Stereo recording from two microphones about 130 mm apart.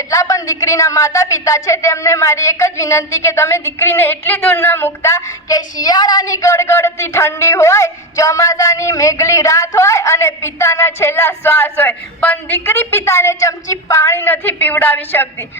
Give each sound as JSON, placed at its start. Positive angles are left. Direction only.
{"t": 0.1, "sound": "a woman's voice", "side_deg": 25}